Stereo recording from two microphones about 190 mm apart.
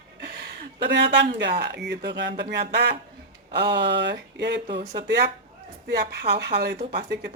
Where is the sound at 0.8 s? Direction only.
60° right (ahead or behind).